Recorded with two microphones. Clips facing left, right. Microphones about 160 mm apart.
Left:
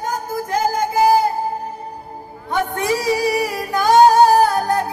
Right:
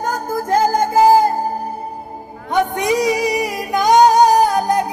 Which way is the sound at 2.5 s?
20° right (ahead or behind).